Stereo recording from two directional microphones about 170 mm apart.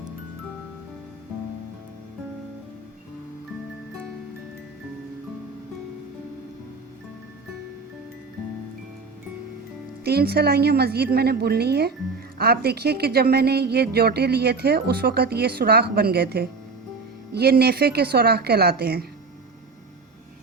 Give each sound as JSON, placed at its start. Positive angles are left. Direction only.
{"t": 10.0, "sound": "a woman's voice", "side_deg": -65}